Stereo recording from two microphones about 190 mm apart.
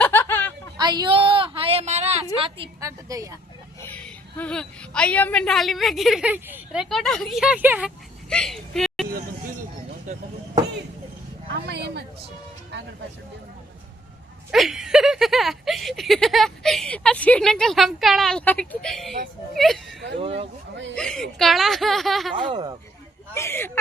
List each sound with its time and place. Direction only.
0.0 s a sound: 10° left (ahead or behind)
0.8 s a sound: 20° right (ahead or behind)
2.8 s a woman's voice: 15° right (ahead or behind)
3.8 s a woman's voice: 10° left (ahead or behind); by 6.8 s 10° right (ahead or behind)
6.9 s speech: centre (ahead or behind)
8.3 s a sound: 5° left (ahead or behind)
10.1 s speech: 40° right (ahead or behind)
11.6 s speech: 60° right (ahead or behind)
14.5 s speech: centre (ahead or behind)
20.1 s speech: 30° right (ahead or behind)
20.9 s speech: 5° left (ahead or behind)
22.4 s speech: 25° right (ahead or behind)
23.3 s speech: 15° left (ahead or behind)